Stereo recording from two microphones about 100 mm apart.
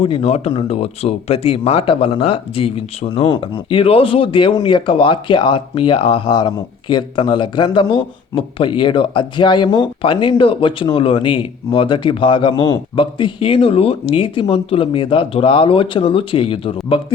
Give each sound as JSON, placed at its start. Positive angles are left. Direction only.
{"t": 0.0, "sound": "speech", "side_deg": 80}
{"t": 3.3, "sound": "speech", "side_deg": 55}